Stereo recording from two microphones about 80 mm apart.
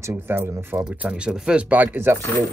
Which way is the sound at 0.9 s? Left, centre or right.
Centre.